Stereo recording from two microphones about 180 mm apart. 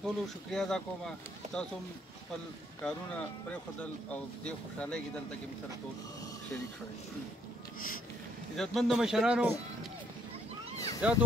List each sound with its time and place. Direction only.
0.0 s speech: 5° left (ahead or behind)
2.8 s speech: 5° left (ahead or behind)
8.5 s speech: centre (ahead or behind)
11.0 s speech: 5° right (ahead or behind)